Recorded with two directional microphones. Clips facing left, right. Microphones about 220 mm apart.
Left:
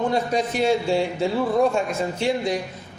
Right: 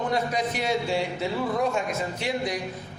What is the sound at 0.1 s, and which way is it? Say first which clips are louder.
A man's voice: left 4 dB; 30° left (ahead or behind).